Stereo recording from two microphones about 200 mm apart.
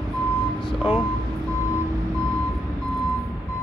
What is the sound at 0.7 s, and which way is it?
Speech, 5° right (ahead or behind).